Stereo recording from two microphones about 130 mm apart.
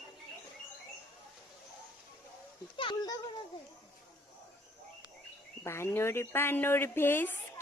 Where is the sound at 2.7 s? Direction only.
40° left (ahead or behind).